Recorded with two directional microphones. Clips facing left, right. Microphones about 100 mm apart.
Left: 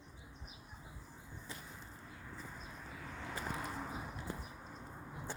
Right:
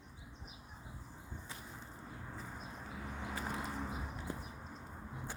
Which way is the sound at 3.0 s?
15° right (ahead or behind).